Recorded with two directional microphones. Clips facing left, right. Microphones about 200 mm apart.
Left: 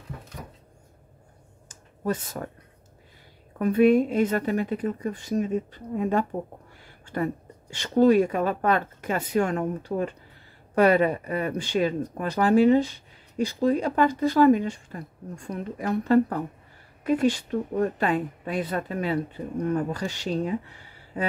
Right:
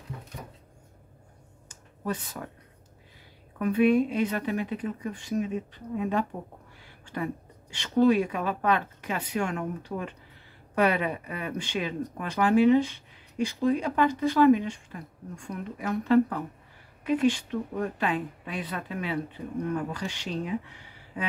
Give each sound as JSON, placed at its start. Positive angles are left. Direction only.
{"t": 2.4, "sound": "a woman's voice", "side_deg": 45}
{"t": 3.5, "sound": "a woman's voice", "side_deg": 40}
{"t": 7.7, "sound": "a woman's voice", "side_deg": 45}